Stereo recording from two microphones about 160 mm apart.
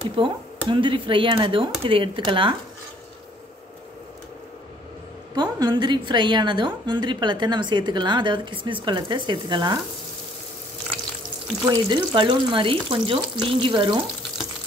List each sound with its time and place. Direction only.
0.1 s speech: 30° right (ahead or behind)
5.3 s a woman's voice: 25° right (ahead or behind)
11.7 s speech: 25° right (ahead or behind)